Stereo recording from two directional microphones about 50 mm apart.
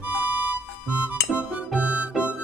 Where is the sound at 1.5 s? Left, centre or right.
Right.